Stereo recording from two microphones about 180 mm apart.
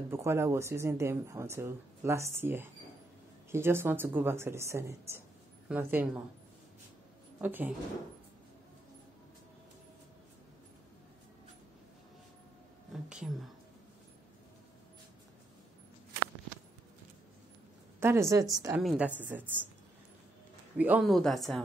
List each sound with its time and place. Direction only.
0.1 s speech: 15° right (ahead or behind)
7.3 s speech: 10° right (ahead or behind)
12.9 s a woman's voice: 5° right (ahead or behind)
18.0 s speech: 15° right (ahead or behind)
18.7 s a woman's voice: centre (ahead or behind)
20.7 s a woman's voice: 10° right (ahead or behind)